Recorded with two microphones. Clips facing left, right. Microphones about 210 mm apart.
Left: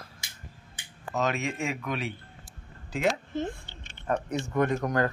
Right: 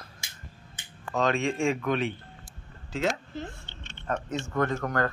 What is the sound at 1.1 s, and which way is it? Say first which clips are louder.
Speech: right 3 dB; 5° left (ahead or behind).